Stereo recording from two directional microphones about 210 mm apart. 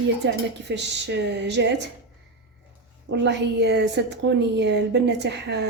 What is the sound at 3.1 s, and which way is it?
A woman's voice, 55° right (ahead or behind).